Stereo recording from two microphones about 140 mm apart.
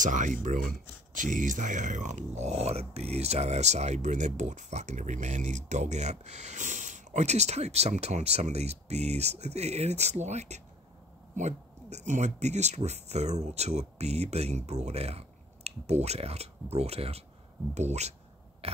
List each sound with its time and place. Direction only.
0.0 s speech: 65° right (ahead or behind)